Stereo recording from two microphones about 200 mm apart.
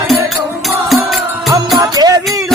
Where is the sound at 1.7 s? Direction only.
20° right (ahead or behind).